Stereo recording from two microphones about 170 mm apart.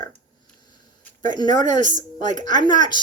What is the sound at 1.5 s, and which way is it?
Speech, 45° right (ahead or behind).